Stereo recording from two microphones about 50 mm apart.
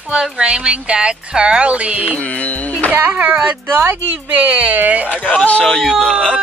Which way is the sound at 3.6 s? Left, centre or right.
Right.